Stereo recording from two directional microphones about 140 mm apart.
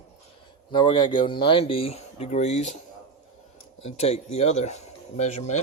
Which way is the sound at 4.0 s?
50° left (ahead or behind).